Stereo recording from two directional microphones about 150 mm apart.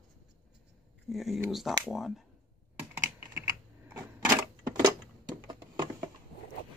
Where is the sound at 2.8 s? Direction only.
20° right (ahead or behind).